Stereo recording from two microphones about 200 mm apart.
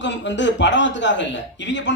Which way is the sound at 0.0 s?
65° left (ahead or behind).